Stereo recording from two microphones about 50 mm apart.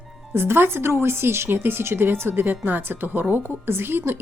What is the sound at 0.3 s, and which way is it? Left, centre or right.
Speech, right.